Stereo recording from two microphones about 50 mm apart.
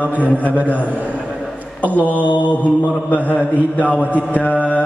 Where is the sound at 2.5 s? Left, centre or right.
Left.